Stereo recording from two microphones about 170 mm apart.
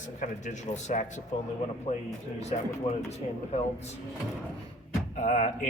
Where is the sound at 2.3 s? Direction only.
40° left (ahead or behind).